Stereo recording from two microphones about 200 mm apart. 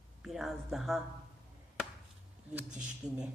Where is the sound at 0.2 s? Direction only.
Centre (ahead or behind).